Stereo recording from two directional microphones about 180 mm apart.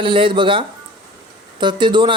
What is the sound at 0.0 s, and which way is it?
Speech, 30° right (ahead or behind).